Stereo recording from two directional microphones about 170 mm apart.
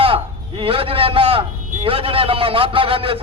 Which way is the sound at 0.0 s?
30° right (ahead or behind).